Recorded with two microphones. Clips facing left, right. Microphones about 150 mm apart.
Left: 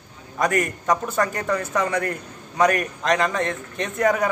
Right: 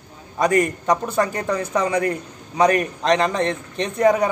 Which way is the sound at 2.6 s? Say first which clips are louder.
Right 3 dB; 25° right (ahead or behind).